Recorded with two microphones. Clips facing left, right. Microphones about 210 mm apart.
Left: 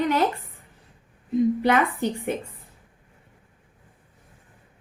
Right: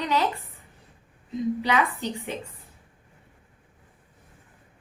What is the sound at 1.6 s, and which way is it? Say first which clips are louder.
Speech: left 4 dB; 50° left (ahead or behind).